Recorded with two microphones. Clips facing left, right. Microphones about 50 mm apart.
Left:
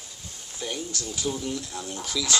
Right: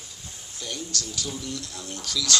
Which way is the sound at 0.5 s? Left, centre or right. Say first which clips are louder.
Left 1 dB; centre.